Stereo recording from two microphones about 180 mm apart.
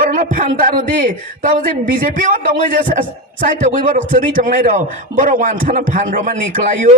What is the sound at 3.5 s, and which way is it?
A man's voice, 50° right (ahead or behind).